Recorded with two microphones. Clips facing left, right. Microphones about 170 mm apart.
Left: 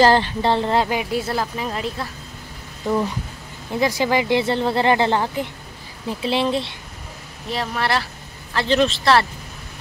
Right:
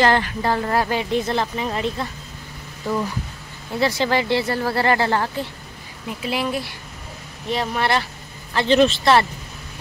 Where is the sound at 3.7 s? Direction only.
15° left (ahead or behind).